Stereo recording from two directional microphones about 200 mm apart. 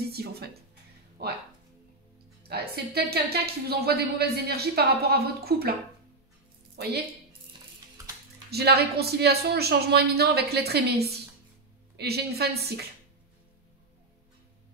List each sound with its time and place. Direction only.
0.1 s a woman's voice: 50° right (ahead or behind)
2.4 s a woman's voice: 50° right (ahead or behind)
6.8 s a woman's voice: 55° right (ahead or behind)
8.5 s a woman's voice: 55° right (ahead or behind)